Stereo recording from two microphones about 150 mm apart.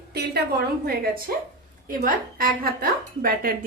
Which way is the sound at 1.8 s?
70° right (ahead or behind).